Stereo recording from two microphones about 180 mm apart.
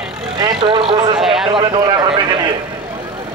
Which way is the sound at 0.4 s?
25° right (ahead or behind).